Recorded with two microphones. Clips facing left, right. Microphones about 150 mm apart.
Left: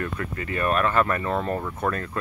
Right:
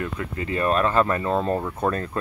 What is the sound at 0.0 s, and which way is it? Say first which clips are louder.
Speech: right 1 dB; 20° right (ahead or behind).